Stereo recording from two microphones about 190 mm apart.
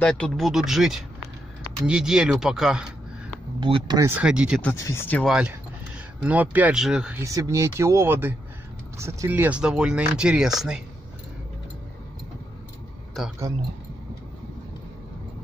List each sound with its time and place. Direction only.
0.0 s speech: 5° left (ahead or behind)
3.5 s speech: 25° right (ahead or behind)
4.1 s speech: 5° right (ahead or behind)
4.6 s speech: 15° left (ahead or behind)
5.2 s speech: 5° right (ahead or behind)
7.2 s speech: 15° right (ahead or behind)